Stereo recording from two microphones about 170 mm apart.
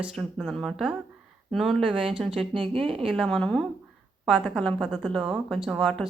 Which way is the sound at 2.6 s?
30° right (ahead or behind).